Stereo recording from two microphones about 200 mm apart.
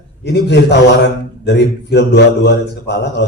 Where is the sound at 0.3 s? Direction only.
60° left (ahead or behind).